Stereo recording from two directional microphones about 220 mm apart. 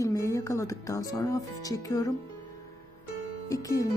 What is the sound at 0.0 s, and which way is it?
Speech, 15° left (ahead or behind).